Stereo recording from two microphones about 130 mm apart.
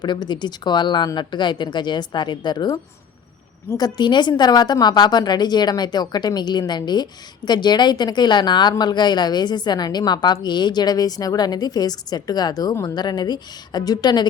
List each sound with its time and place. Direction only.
0.0 s a woman's voice: 35° left (ahead or behind)
3.8 s a woman's voice: 35° left (ahead or behind)